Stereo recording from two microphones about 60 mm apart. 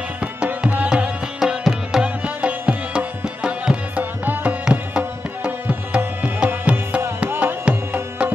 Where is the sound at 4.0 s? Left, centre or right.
Right.